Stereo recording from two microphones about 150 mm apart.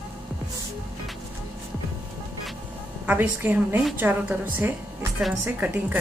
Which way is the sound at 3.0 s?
10° right (ahead or behind).